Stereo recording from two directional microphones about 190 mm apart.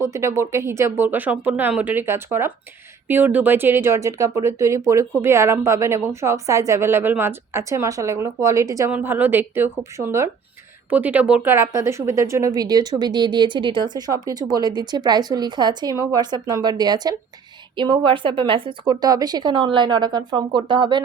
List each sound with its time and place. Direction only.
0.0 s a woman's voice: 15° right (ahead or behind)